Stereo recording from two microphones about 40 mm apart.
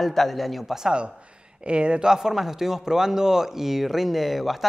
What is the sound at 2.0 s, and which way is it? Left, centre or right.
A man's voice, centre.